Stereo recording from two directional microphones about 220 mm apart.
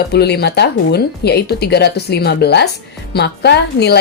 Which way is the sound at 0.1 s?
45° left (ahead or behind).